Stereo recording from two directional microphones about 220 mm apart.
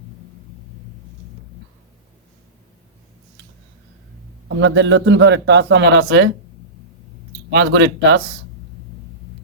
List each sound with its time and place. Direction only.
4.4 s a man's voice: 55° right (ahead or behind)
7.5 s a man's voice: 55° right (ahead or behind)